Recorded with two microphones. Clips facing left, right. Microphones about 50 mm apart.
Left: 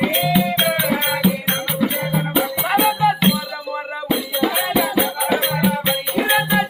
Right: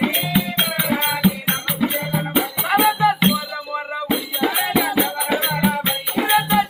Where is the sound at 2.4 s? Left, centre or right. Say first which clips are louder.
Even; centre.